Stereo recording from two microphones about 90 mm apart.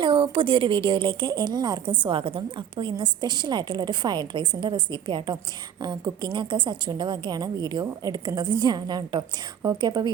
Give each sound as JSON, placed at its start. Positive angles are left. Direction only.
{"t": 0.0, "sound": "a woman's voice", "side_deg": -70}